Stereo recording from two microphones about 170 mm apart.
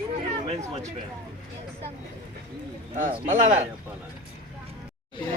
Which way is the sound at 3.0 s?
50° right (ahead or behind).